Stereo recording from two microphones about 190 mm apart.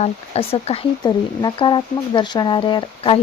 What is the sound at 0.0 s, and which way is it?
Speech, 30° left (ahead or behind).